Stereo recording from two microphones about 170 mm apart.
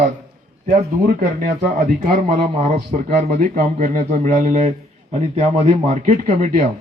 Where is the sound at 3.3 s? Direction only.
55° right (ahead or behind).